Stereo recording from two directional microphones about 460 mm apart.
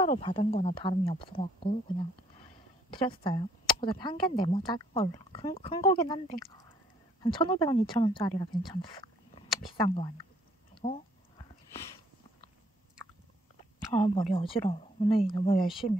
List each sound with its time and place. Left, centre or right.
0.0 s speech: centre
10.7 s a sound: centre
13.9 s speech: centre
15.6 s speech: centre